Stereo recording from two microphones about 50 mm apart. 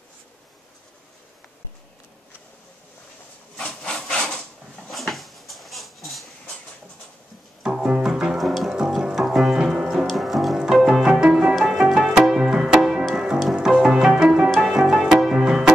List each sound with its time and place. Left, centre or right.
3.5 s wood: left
3.9 s a sound: centre
7.6 s music: centre
8.4 s music: centre
15.4 s music: centre